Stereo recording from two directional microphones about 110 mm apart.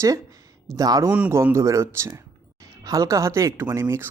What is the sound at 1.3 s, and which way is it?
Speech, 25° right (ahead or behind).